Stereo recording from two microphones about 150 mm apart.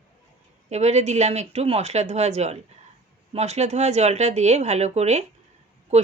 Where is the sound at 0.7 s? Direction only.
50° right (ahead or behind).